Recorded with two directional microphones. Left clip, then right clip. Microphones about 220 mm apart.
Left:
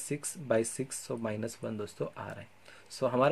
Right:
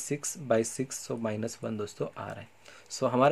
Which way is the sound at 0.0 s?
10° right (ahead or behind).